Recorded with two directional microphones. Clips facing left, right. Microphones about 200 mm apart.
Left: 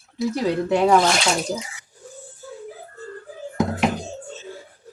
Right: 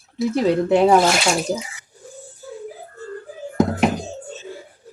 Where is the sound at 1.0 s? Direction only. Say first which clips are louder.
Right 2 dB; 5° right (ahead or behind).